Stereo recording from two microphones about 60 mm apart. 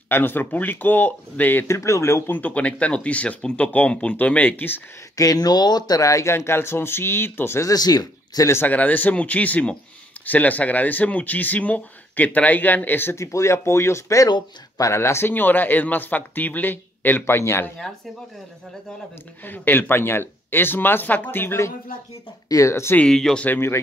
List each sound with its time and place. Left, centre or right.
0.1 s speech: left
1.7 s speech: left
2.3 s speech: left
5.1 s speech: left
6.3 s speech: left
7.6 s speech: left
8.6 s speech: left
13.1 s speech: left
17.3 s speech: left
19.4 s speech: left
22.7 s speech: left
23.0 s speech: centre